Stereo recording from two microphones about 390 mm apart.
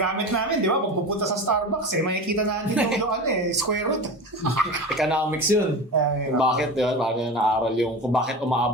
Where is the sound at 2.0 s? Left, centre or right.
Right.